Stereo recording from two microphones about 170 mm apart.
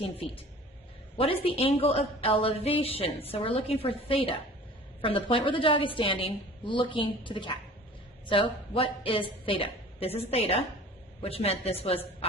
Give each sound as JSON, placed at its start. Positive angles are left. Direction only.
{"t": 1.1, "sound": "a woman's voice", "side_deg": 35}